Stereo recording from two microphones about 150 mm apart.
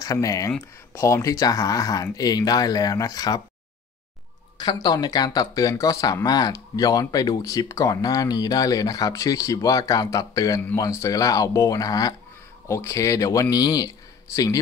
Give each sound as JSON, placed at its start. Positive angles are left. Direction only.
{"t": 0.0, "sound": "speech", "side_deg": 20}
{"t": 4.6, "sound": "a man's voice", "side_deg": 25}